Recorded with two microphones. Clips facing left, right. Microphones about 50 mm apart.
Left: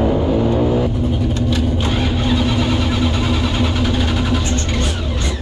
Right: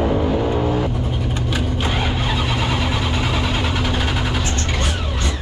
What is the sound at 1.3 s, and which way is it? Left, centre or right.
Vehicle, centre.